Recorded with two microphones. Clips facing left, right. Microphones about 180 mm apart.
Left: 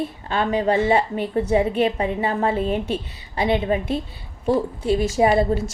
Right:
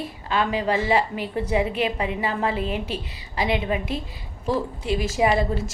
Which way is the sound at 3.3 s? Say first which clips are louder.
Left 4 dB; 25° left (ahead or behind).